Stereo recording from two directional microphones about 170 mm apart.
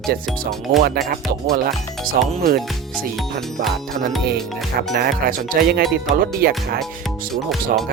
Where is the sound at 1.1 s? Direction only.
60° right (ahead or behind).